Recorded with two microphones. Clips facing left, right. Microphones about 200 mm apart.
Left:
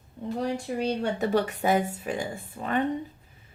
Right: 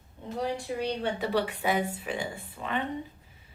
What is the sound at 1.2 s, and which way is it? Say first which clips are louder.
A woman's voice: left 4 dB; 45° left (ahead or behind).